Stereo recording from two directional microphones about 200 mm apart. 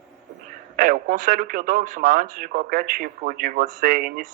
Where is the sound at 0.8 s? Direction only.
45° right (ahead or behind).